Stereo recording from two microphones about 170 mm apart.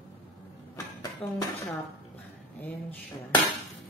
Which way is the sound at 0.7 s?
20° left (ahead or behind).